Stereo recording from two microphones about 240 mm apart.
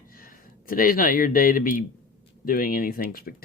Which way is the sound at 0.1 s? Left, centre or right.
Left.